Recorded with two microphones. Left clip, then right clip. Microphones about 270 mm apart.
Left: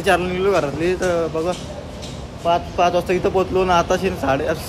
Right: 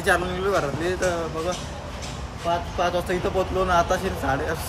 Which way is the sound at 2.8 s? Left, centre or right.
Centre.